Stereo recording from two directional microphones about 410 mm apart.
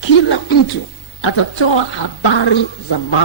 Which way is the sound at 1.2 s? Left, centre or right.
Left.